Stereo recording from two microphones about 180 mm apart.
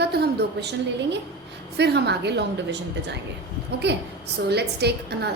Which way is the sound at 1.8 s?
70° right (ahead or behind).